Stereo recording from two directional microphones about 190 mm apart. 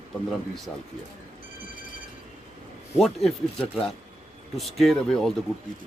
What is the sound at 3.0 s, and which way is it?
Speech, centre (ahead or behind).